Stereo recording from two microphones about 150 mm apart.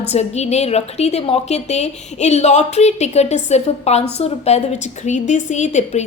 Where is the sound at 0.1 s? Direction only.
45° left (ahead or behind).